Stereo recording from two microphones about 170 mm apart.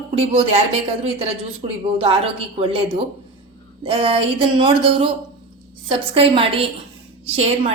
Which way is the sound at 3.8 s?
35° right (ahead or behind).